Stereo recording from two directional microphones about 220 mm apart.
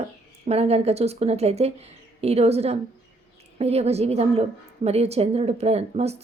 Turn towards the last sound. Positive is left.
turn(degrees=-30)  # may be behind; listen again after turning